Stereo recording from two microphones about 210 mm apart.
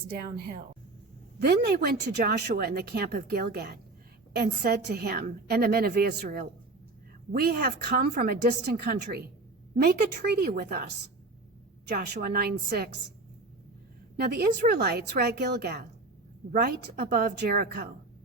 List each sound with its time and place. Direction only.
1.4 s a woman's voice: 50° right (ahead or behind)
14.2 s a woman's voice: 50° right (ahead or behind)